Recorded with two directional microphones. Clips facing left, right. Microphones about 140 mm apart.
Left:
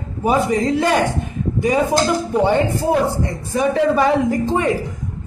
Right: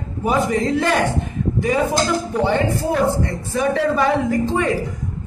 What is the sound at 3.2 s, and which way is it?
A man's voice, 15° left (ahead or behind).